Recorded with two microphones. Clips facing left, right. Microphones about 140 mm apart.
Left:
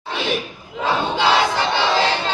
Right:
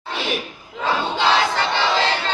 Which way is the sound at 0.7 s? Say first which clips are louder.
Left 1 dB; 15° left (ahead or behind).